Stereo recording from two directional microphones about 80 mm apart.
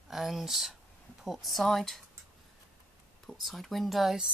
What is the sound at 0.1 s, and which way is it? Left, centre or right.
Speech, centre.